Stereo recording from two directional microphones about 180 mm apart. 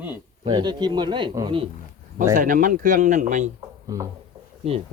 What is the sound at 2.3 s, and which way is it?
Speech, 50° right (ahead or behind).